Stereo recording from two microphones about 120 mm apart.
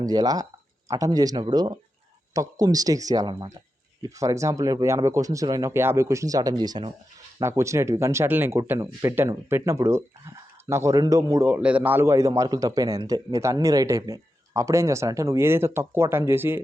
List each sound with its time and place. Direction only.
0.0 s a man's voice: 30° right (ahead or behind)
7.3 s a man's voice: 25° right (ahead or behind)
11.4 s a man's voice: 15° right (ahead or behind)